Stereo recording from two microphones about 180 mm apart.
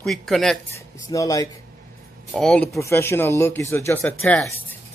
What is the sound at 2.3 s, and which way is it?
Speech, 5° left (ahead or behind).